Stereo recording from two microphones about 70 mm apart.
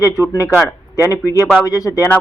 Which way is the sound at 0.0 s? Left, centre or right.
Left.